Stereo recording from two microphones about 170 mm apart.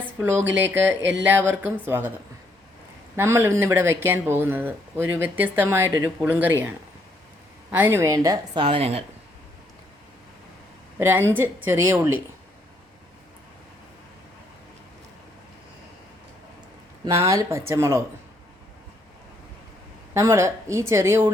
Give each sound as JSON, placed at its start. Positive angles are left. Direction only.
{"t": 0.2, "sound": "speech", "side_deg": -15}
{"t": 3.2, "sound": "speech", "side_deg": -15}
{"t": 8.6, "sound": "speech", "side_deg": -35}
{"t": 10.9, "sound": "speech", "side_deg": -15}
{"t": 17.2, "sound": "speech", "side_deg": -20}
{"t": 20.1, "sound": "speech", "side_deg": -15}